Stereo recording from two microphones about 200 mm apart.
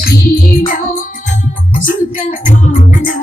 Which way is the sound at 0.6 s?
45° left (ahead or behind).